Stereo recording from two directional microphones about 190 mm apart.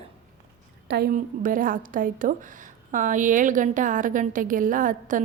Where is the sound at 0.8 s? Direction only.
55° right (ahead or behind).